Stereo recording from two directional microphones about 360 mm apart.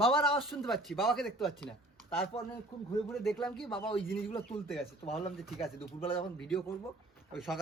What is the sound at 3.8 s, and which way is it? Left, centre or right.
A man's voice, centre.